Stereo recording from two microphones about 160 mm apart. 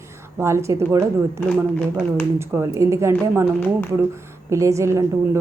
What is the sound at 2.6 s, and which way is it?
Speech, 20° right (ahead or behind).